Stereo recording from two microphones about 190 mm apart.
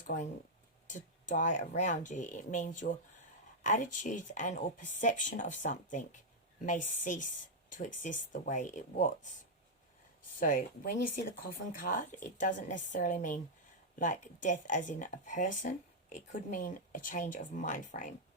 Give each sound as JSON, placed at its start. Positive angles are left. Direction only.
{"t": 0.0, "sound": "speech", "side_deg": 40}
{"t": 10.4, "sound": "speech", "side_deg": 45}
{"t": 14.4, "sound": "speech", "side_deg": 40}